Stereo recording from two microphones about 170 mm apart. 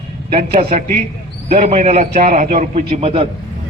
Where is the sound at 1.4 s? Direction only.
45° right (ahead or behind).